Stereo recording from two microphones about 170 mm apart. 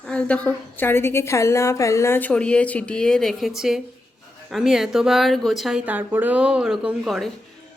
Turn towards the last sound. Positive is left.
turn(degrees=0)  # may be behind; listen again after turning